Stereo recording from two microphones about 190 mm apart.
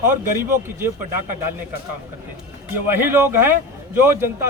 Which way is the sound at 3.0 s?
10° right (ahead or behind).